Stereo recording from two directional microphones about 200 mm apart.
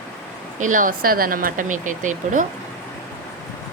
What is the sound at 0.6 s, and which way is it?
Speech, 40° right (ahead or behind).